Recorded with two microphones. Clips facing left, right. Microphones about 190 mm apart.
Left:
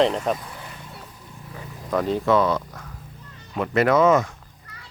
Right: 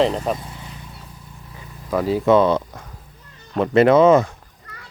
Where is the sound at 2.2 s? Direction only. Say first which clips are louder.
Right 7 dB; 25° right (ahead or behind).